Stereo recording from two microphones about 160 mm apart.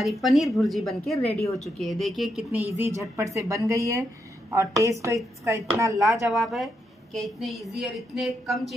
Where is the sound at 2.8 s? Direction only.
20° right (ahead or behind).